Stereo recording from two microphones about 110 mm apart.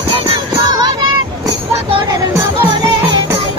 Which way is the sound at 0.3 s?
40° right (ahead or behind).